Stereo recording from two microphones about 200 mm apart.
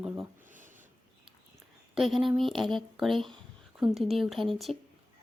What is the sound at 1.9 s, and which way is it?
Speech, centre (ahead or behind).